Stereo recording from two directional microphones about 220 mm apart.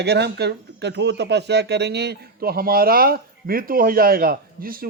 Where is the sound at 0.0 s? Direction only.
50° right (ahead or behind).